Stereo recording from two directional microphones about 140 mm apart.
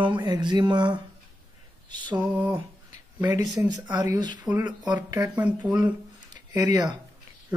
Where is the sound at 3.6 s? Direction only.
20° right (ahead or behind).